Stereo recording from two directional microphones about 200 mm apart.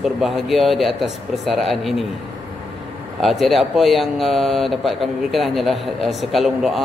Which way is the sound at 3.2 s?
Centre (ahead or behind).